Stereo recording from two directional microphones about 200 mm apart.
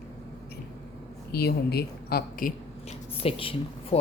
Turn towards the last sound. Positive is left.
turn(degrees=30)  # may be behind; listen again after turning